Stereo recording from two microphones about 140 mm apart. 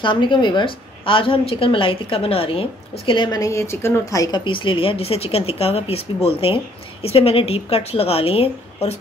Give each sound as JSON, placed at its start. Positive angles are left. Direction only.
{"t": 0.0, "sound": "a woman's voice", "side_deg": 35}
{"t": 3.1, "sound": "a woman's voice", "side_deg": 30}
{"t": 4.5, "sound": "speech", "side_deg": 40}